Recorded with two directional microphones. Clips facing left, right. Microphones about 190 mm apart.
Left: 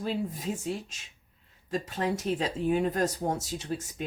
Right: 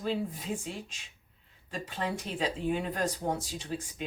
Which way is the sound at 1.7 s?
40° left (ahead or behind).